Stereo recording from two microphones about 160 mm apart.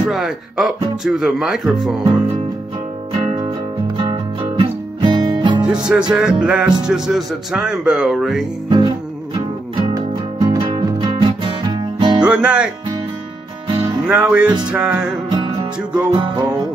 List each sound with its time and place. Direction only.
0.0 s speech: centre (ahead or behind)
3.8 s music: 30° right (ahead or behind)
5.9 s speech: 5° right (ahead or behind)
8.6 s music: 30° right (ahead or behind)
9.9 s music: 20° right (ahead or behind)
12.2 s music: 5° right (ahead or behind)
14.0 s music: 5° right (ahead or behind)
14.7 s speech: 5° right (ahead or behind)
16.1 s music: 30° right (ahead or behind)